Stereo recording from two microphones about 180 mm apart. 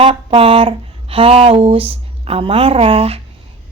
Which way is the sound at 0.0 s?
30° right (ahead or behind).